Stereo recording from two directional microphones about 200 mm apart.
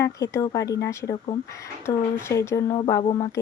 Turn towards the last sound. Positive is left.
turn(degrees=20)  # may be behind; listen again after turning